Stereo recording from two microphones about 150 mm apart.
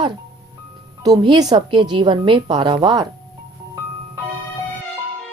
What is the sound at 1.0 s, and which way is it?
A woman's voice, 30° right (ahead or behind).